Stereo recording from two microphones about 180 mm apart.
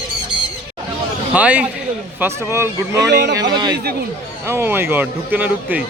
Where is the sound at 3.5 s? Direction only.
25° right (ahead or behind).